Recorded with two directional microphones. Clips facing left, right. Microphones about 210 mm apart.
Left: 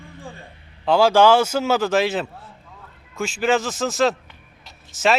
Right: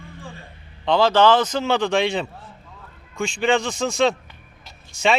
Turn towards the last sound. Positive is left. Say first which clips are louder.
# left 1 dB
turn(degrees=0)  # may be behind; listen again after turning